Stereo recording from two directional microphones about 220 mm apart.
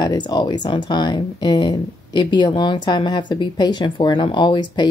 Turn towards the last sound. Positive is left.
turn(degrees=20)  # may be behind; listen again after turning